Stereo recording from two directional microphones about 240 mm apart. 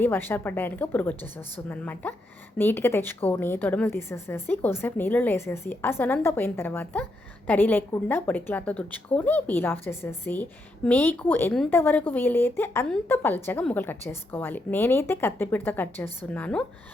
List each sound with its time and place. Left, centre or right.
0.0 s a woman's voice: centre